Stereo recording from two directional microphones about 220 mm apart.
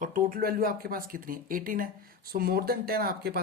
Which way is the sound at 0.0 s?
40° right (ahead or behind).